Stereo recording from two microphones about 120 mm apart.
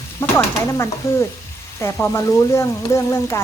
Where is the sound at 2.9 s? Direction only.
25° left (ahead or behind).